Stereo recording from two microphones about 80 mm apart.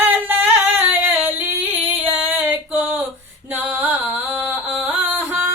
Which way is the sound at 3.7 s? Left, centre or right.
Right.